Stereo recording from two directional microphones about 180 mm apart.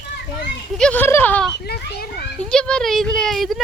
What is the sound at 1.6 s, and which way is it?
Speech, 65° left (ahead or behind).